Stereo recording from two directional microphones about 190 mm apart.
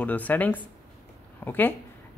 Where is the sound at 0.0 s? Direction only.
10° left (ahead or behind).